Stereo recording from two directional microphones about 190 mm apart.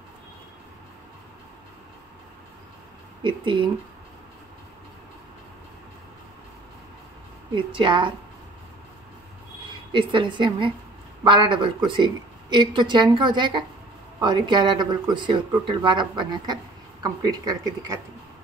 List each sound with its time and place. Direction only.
3.2 s speech: 25° right (ahead or behind)
7.5 s speech: 25° right (ahead or behind)
9.9 s speech: 25° right (ahead or behind)